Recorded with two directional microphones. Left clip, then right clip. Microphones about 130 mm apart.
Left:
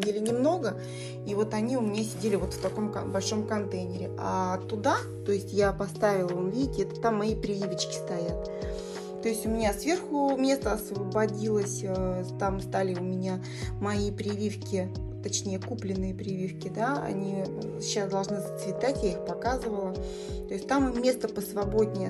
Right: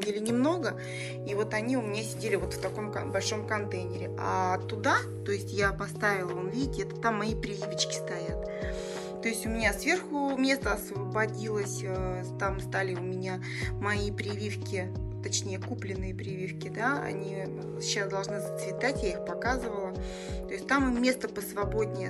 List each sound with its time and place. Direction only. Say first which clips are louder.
0.3 s a woman's voice: left 1 dB; 25° left (ahead or behind)
9.2 s a woman's voice: left 2 dB; 30° left (ahead or behind)
10.1 s speech: left 4 dB; 5° left (ahead or behind)
10.4 s speech: left 1 dB; 35° left (ahead or behind)
14.4 s speech: left 3 dB; 35° left (ahead or behind)